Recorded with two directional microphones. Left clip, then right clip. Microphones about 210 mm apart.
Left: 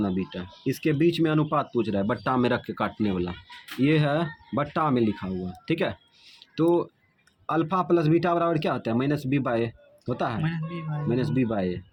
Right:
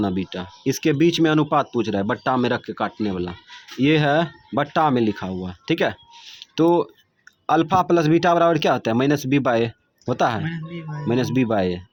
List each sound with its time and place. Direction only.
0.0 s speech: 30° right (ahead or behind)
10.4 s speech: centre (ahead or behind)
11.1 s speech: 30° right (ahead or behind)